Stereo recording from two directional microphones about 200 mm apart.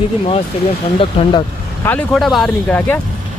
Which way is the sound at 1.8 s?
5° left (ahead or behind).